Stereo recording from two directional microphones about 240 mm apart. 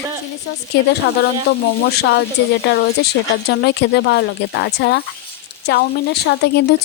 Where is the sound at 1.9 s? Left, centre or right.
Left.